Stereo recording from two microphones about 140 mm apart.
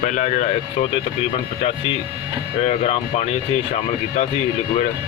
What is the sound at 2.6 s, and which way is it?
Speech, 50° left (ahead or behind).